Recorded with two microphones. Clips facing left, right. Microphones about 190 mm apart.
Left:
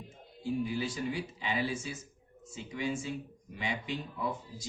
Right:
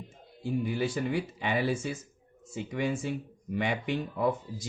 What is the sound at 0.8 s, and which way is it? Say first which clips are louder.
Speech: right 5 dB; 60° right (ahead or behind).